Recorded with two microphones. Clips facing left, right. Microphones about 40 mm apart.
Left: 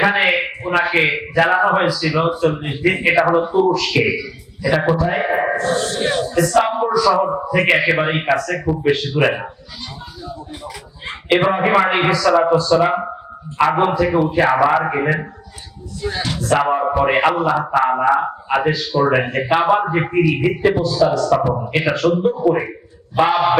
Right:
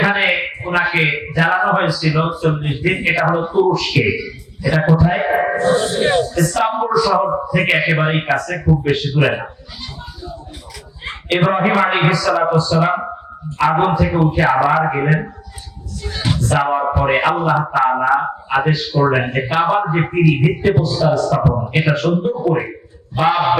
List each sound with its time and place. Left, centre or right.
0.0 s a man's voice: centre
5.5 s speech: centre
6.3 s a man's voice: centre
11.0 s a sound: centre
11.8 s a man's voice: centre
16.0 s speech: left
16.4 s a man's voice: centre